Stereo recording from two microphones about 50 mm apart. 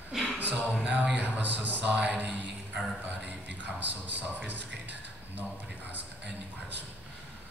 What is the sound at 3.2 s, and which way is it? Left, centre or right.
A man's voice, right.